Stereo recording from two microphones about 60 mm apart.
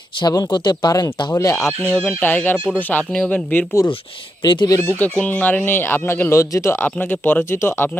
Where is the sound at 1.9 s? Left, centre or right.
Centre.